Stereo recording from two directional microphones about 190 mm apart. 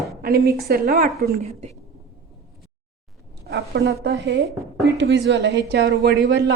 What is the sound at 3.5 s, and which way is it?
A woman's voice, 55° right (ahead or behind).